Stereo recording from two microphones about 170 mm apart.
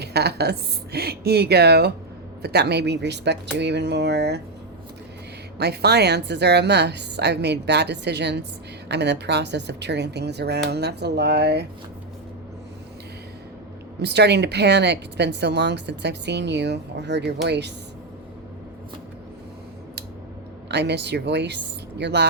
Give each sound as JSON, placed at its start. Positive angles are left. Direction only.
{"t": 0.0, "sound": "a woman's voice", "side_deg": -75}
{"t": 5.5, "sound": "speech", "side_deg": -75}
{"t": 14.0, "sound": "speech", "side_deg": -80}
{"t": 20.7, "sound": "speech", "side_deg": -80}